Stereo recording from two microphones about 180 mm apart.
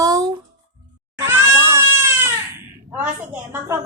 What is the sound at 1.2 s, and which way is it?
Cat, 10° right (ahead or behind).